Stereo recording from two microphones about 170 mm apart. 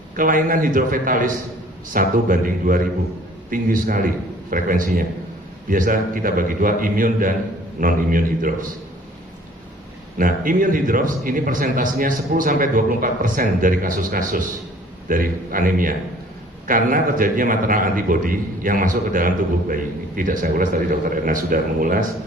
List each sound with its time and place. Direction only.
0.2 s a man's voice: 55° right (ahead or behind)
10.2 s a man's voice: 55° right (ahead or behind)